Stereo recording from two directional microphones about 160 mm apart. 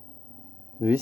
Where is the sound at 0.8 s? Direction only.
10° right (ahead or behind).